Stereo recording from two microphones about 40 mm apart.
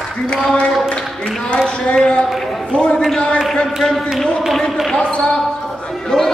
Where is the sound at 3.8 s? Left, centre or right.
Centre.